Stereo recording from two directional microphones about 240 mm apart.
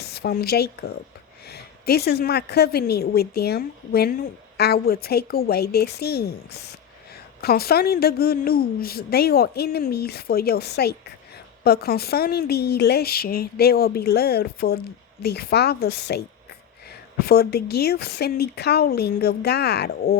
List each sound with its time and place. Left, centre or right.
0.0 s a woman's voice: left
17.2 s a woman's voice: left